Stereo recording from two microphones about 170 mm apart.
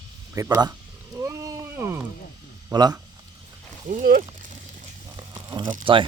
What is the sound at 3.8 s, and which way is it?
Speech, 55° right (ahead or behind).